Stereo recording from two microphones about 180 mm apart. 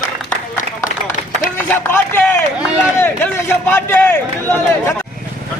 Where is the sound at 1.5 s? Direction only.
10° left (ahead or behind).